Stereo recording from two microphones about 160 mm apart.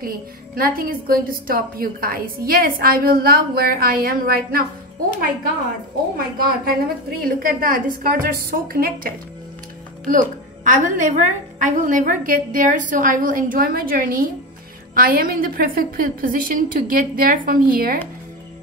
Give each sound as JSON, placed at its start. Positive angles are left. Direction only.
{"t": 0.6, "sound": "a woman's voice", "side_deg": -65}
{"t": 6.1, "sound": "a woman's voice", "side_deg": -65}
{"t": 10.0, "sound": "a woman's voice", "side_deg": -55}